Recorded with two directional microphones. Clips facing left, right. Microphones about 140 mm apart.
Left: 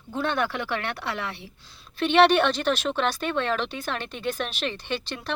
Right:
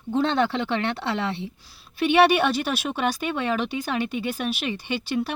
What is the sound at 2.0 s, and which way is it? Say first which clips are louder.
Speech: even; 10° right (ahead or behind).